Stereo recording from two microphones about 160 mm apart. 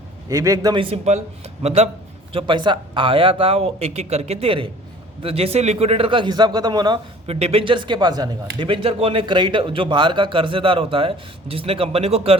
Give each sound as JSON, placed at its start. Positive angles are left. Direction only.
{"t": 0.3, "sound": "a man's voice", "side_deg": -20}
{"t": 2.3, "sound": "speech", "side_deg": -30}
{"t": 7.3, "sound": "speech", "side_deg": -40}